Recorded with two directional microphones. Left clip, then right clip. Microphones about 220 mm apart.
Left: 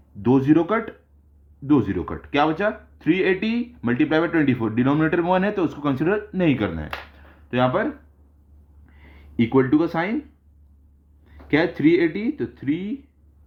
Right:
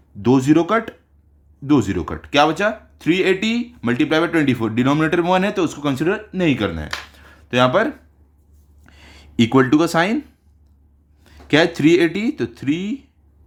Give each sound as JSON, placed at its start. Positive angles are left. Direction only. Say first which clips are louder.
{"t": 0.2, "sound": "speech", "louder": "right 3 dB", "side_deg": -20}
{"t": 11.2, "sound": "speech", "louder": "right 5 dB", "side_deg": -30}